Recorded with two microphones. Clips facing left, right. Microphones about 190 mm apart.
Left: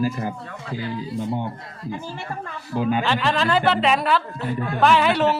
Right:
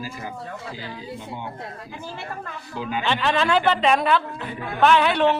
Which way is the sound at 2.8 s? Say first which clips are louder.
Left 7 dB; 50° left (ahead or behind).